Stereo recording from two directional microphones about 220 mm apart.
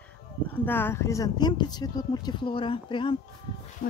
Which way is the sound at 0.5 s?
10° left (ahead or behind).